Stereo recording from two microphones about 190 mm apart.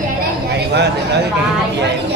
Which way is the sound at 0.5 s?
60° right (ahead or behind).